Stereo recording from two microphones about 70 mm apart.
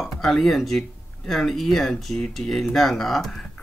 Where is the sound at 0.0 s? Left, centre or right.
Centre.